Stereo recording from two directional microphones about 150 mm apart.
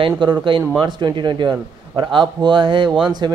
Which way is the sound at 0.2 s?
30° right (ahead or behind).